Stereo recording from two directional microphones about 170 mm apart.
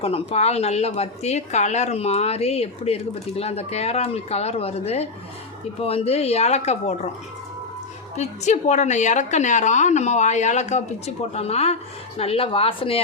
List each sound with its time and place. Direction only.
0.0 s a woman's voice: 35° left (ahead or behind)
8.1 s a woman's voice: 45° left (ahead or behind)